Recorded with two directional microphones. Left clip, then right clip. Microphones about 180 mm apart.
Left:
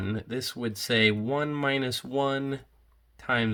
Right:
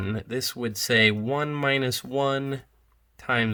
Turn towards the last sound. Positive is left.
turn(degrees=-30)  # may be behind; listen again after turning